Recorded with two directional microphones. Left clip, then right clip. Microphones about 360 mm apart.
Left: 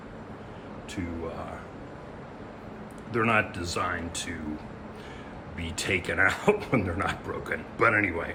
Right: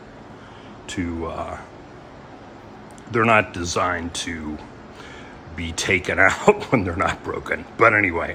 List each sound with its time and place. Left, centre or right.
1.0 s speech: centre
3.1 s speech: centre
5.5 s speech: centre